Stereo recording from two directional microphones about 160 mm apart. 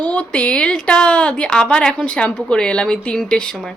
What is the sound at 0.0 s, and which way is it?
A woman's voice, 10° left (ahead or behind).